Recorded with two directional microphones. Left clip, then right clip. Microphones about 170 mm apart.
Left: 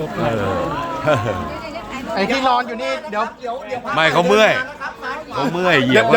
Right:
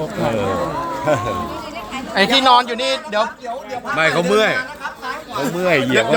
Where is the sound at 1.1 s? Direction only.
25° left (ahead or behind).